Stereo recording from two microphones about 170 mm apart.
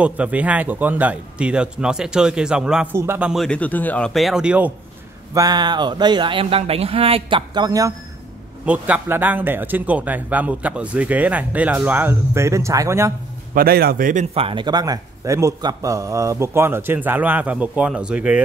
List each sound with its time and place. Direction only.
0.0 s speech: 10° right (ahead or behind)
3.4 s speech: 10° left (ahead or behind); by 4.7 s 10° right (ahead or behind)
5.3 s speech: 20° right (ahead or behind)
8.6 s speech: 10° right (ahead or behind)
13.6 s a man's voice: 60° right (ahead or behind)
14.3 s speech: 30° right (ahead or behind); by 18.4 s 5° right (ahead or behind)